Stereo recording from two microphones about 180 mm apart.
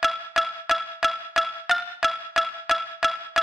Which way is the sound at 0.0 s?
Centre (ahead or behind).